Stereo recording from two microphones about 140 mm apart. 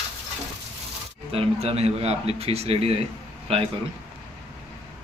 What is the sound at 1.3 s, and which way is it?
A man's voice, 45° right (ahead or behind).